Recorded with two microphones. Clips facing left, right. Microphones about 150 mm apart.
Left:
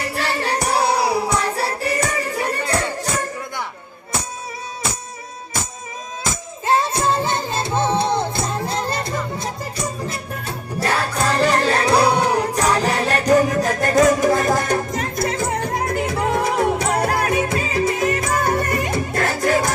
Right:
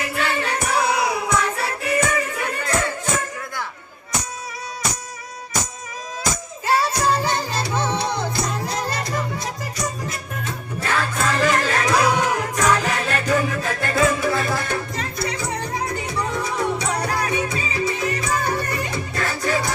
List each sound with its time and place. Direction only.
0.0 s music: 35° left (ahead or behind)
6.3 s music: 25° left (ahead or behind); by 19.7 s 55° left (ahead or behind)